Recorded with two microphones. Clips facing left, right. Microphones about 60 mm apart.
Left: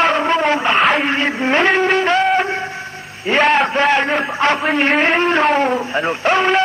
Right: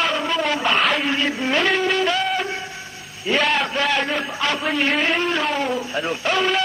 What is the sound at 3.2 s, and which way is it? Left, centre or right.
A man's voice, left.